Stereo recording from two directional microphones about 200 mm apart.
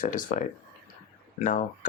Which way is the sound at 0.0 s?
40° left (ahead or behind).